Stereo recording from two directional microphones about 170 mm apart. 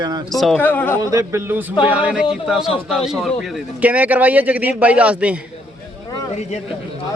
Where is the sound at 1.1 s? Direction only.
15° right (ahead or behind).